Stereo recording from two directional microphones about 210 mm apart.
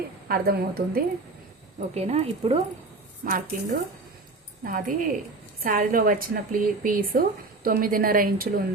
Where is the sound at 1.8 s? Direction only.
30° right (ahead or behind).